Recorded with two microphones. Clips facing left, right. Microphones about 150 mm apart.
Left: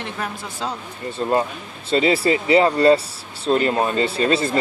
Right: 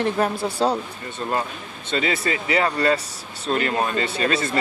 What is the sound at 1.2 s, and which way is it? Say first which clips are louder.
Speech: left 5 dB; 25° left (ahead or behind).